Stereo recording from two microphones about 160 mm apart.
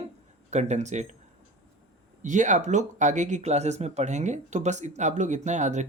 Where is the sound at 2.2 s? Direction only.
50° right (ahead or behind).